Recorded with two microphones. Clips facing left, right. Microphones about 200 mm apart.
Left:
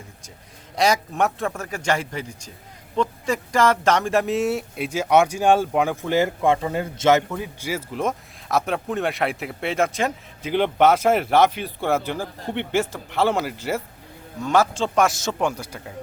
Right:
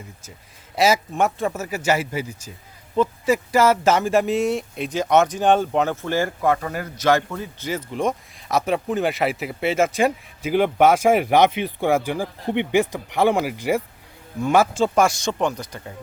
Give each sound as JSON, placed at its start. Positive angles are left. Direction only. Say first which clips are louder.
{"t": 0.8, "sound": "speech", "louder": "right 2 dB", "side_deg": 0}
{"t": 7.3, "sound": "speech", "louder": "even", "side_deg": 10}